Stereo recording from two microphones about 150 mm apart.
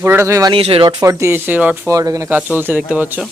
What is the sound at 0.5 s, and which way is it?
Speech, 40° right (ahead or behind).